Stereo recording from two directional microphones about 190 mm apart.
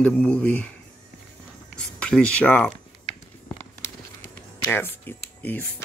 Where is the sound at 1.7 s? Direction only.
5° left (ahead or behind).